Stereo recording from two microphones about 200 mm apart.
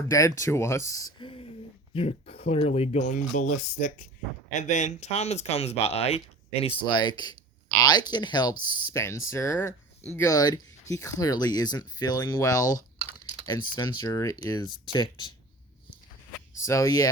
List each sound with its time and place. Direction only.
0.1 s speech: 15° left (ahead or behind)
1.2 s a sound: 25° left (ahead or behind)
1.9 s speech: 30° left (ahead or behind)
16.6 s speech: 15° left (ahead or behind)